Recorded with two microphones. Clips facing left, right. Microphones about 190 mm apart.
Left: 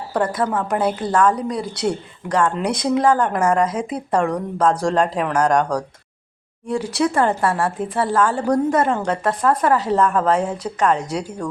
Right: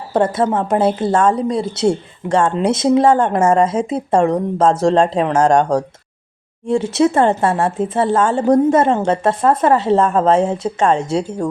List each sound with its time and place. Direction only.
0.1 s a woman's voice: 25° right (ahead or behind)